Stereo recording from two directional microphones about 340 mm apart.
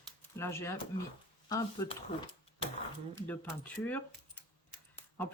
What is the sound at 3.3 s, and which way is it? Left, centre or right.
Speech, centre.